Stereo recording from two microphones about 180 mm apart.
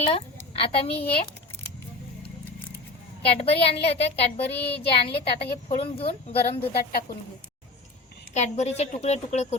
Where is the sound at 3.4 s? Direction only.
30° left (ahead or behind).